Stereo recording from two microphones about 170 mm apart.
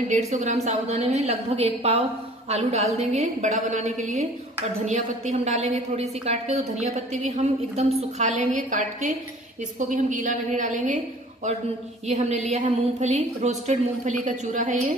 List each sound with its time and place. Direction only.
0.1 s a woman's voice: 40° right (ahead or behind)
12.1 s a woman's voice: 40° right (ahead or behind)